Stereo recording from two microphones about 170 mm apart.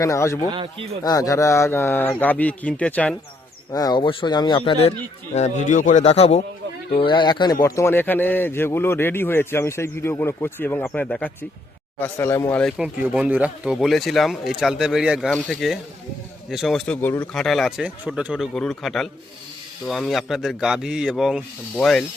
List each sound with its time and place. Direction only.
0.0 s a man's voice: 20° left (ahead or behind)
0.5 s a man's voice: 30° right (ahead or behind)
1.0 s a man's voice: 20° left (ahead or behind)
3.7 s a man's voice: 20° left (ahead or behind); by 12.8 s 5° left (ahead or behind)
12.8 s speech: 10° right (ahead or behind); by 17.2 s 10° left (ahead or behind)
17.3 s speech: centre (ahead or behind)